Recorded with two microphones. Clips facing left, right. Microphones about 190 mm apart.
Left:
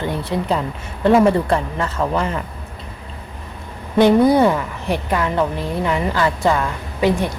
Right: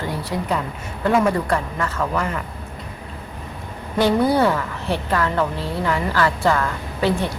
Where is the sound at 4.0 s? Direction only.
20° left (ahead or behind).